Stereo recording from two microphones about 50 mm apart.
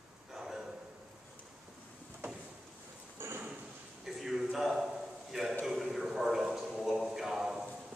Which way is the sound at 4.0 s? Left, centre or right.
Centre.